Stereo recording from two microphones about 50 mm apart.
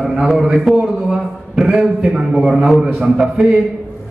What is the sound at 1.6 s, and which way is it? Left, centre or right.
A man's voice, centre.